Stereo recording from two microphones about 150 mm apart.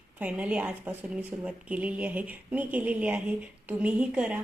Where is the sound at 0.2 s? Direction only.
10° right (ahead or behind).